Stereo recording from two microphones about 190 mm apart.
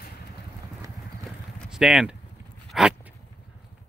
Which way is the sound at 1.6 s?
Centre (ahead or behind).